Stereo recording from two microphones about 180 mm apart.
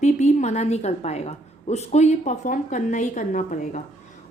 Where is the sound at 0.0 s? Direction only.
40° left (ahead or behind).